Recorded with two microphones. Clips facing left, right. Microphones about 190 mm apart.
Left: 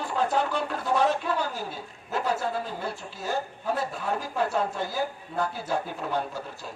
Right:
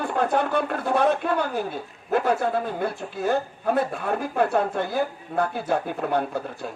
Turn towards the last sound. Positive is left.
turn(degrees=-55)  # may be behind; listen again after turning